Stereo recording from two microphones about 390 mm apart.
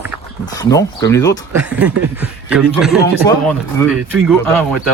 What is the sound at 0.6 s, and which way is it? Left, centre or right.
Speech, centre.